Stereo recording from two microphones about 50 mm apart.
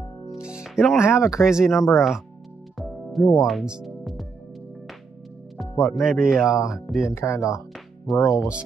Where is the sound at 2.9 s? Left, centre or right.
Centre.